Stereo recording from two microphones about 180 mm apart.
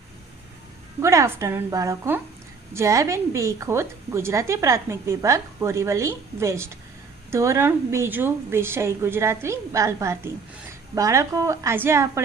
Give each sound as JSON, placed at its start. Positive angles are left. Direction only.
{"t": 1.0, "sound": "a woman's voice", "side_deg": -15}